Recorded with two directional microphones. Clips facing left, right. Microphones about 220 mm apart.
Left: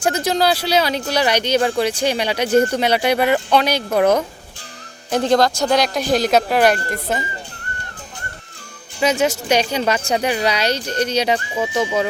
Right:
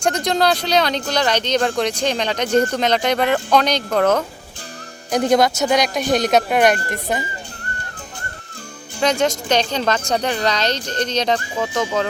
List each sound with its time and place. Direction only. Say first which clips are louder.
0.0 s speech: even; 5° left (ahead or behind)
5.2 s a man's voice: even; 20° right (ahead or behind)
5.6 s a woman's voice: even; centre (ahead or behind)
9.0 s speech: even; 5° left (ahead or behind)